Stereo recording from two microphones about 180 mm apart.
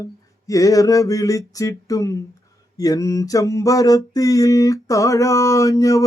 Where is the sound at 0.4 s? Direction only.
20° left (ahead or behind).